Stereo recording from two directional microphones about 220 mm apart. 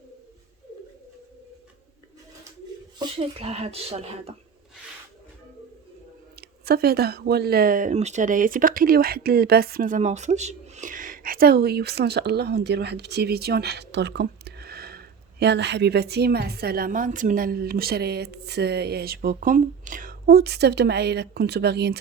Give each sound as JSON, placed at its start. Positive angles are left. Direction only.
{"t": 3.0, "sound": "speech", "side_deg": -25}
{"t": 6.7, "sound": "speech", "side_deg": -45}